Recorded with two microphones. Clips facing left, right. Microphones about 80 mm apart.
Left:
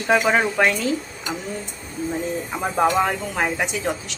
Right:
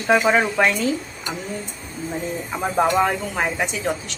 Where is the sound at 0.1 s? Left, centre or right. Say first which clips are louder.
Right 1 dB; centre.